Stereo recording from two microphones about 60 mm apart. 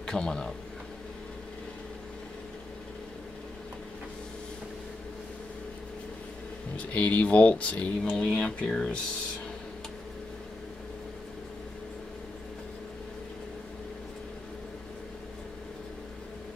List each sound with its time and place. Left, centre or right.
0.0 s a man's voice: centre
6.8 s speech: left